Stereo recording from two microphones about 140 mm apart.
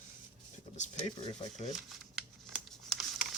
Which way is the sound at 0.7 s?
60° left (ahead or behind).